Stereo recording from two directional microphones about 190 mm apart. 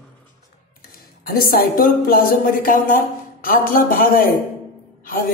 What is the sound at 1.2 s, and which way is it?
A woman's voice, 50° left (ahead or behind).